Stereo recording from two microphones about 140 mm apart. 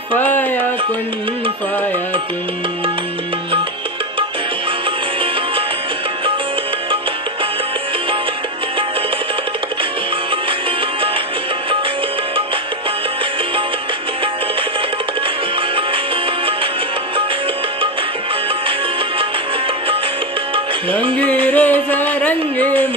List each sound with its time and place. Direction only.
0.1 s music: 10° left (ahead or behind)
20.5 s music: 40° right (ahead or behind)
21.5 s music: 10° left (ahead or behind)